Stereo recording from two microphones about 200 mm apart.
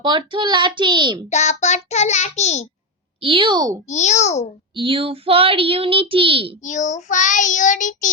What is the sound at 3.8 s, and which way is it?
Child singing, 35° left (ahead or behind).